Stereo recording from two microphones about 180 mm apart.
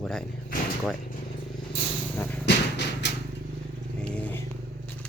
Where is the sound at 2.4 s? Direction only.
75° left (ahead or behind).